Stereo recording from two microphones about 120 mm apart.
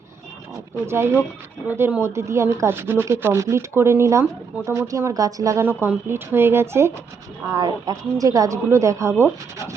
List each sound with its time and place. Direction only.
0.9 s speech: 20° right (ahead or behind)
5.6 s speech: 15° right (ahead or behind)
7.5 s speech: 30° right (ahead or behind)